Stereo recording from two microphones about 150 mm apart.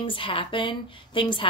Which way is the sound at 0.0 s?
35° left (ahead or behind).